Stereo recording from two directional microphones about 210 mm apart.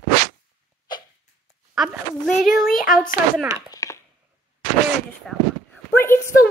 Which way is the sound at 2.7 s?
40° left (ahead or behind).